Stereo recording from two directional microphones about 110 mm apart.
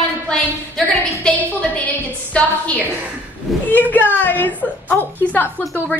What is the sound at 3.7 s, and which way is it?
A woman's voice, 15° left (ahead or behind).